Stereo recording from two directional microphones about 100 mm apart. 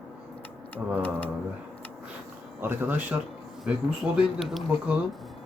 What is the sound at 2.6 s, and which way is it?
Speech, 20° right (ahead or behind).